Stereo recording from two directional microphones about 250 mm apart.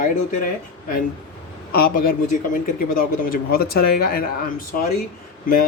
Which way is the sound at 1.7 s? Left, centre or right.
Left.